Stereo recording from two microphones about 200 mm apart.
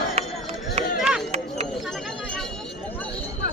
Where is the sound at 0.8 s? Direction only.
30° right (ahead or behind).